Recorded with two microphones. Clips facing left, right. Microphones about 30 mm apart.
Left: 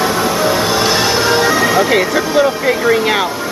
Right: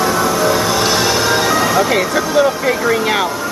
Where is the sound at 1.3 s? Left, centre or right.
Centre.